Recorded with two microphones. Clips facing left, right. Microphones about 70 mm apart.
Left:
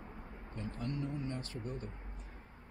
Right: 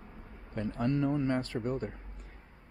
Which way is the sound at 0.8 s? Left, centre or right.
Right.